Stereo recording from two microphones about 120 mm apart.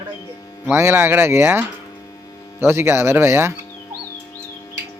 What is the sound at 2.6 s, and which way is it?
Speech, 20° right (ahead or behind).